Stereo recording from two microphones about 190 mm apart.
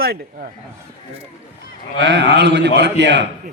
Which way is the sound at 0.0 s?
50° right (ahead or behind).